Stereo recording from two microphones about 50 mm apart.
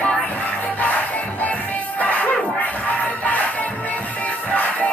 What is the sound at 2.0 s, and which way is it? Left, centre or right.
Music, left.